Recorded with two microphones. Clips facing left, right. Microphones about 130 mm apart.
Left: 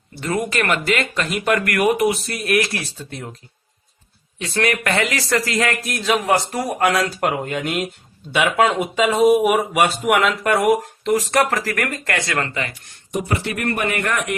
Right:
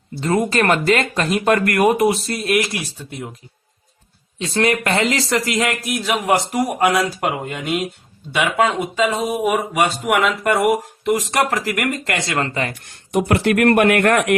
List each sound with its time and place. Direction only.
0.2 s speech: 30° right (ahead or behind); by 3.2 s 15° right (ahead or behind)
4.4 s speech: 25° right (ahead or behind)
7.3 s speech: centre (ahead or behind)
11.0 s speech: 15° right (ahead or behind); by 12.7 s 35° right (ahead or behind)
13.1 s speech: 70° right (ahead or behind)